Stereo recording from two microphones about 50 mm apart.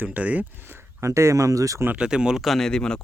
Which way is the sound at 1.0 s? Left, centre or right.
Right.